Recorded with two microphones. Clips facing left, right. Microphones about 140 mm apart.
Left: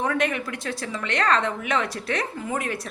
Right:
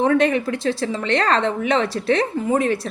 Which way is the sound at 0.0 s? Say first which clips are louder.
Right 8 dB; 30° right (ahead or behind).